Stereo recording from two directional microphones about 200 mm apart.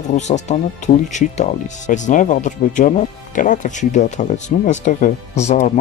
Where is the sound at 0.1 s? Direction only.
35° left (ahead or behind).